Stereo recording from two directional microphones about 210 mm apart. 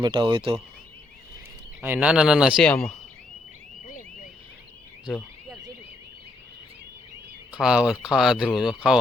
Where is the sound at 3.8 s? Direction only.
40° left (ahead or behind).